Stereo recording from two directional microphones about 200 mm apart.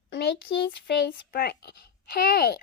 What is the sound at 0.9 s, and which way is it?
A child's voice, 50° left (ahead or behind).